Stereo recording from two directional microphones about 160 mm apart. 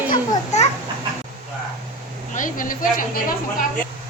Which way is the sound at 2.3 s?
55° left (ahead or behind).